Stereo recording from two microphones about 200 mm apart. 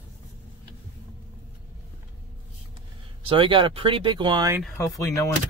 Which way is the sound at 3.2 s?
25° right (ahead or behind).